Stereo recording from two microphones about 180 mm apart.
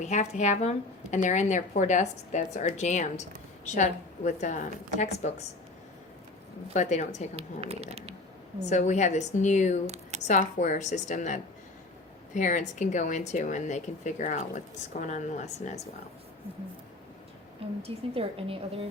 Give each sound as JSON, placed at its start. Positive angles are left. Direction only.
{"t": 0.1, "sound": "a woman's voice", "side_deg": 40}
{"t": 6.7, "sound": "a woman's voice", "side_deg": 40}
{"t": 7.3, "sound": "a woman's voice", "side_deg": -35}
{"t": 8.7, "sound": "a woman's voice", "side_deg": 40}
{"t": 9.8, "sound": "speech", "side_deg": -40}
{"t": 10.2, "sound": "speech", "side_deg": 45}
{"t": 17.8, "sound": "a woman's voice", "side_deg": -30}